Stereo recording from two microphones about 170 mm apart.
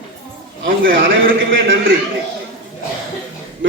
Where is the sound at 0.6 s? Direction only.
55° right (ahead or behind).